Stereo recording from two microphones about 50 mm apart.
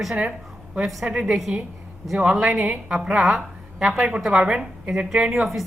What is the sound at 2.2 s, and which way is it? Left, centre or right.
A woman's voice, centre.